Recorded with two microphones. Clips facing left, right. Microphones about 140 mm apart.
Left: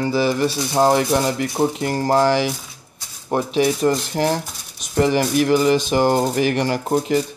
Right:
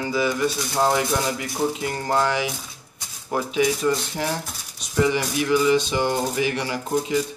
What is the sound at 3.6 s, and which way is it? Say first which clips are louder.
Speech: left 3 dB; 50° left (ahead or behind).